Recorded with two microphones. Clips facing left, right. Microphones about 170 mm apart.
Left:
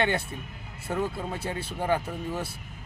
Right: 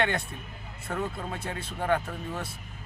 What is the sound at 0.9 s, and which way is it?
A man's voice, 20° left (ahead or behind).